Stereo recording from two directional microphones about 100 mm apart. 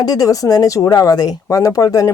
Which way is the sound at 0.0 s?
40° left (ahead or behind).